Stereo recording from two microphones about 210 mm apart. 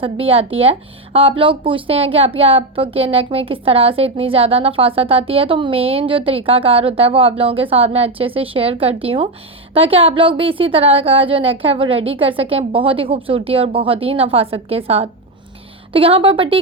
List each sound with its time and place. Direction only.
0.0 s speech: 25° right (ahead or behind)